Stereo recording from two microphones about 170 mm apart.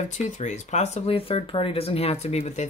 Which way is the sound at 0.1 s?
45° left (ahead or behind).